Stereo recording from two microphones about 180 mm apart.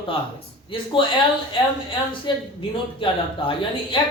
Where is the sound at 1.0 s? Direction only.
30° left (ahead or behind).